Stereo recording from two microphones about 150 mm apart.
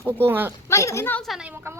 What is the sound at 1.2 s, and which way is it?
Speech, centre (ahead or behind).